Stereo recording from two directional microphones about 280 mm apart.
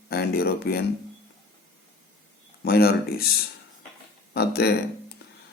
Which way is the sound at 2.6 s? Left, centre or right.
Left.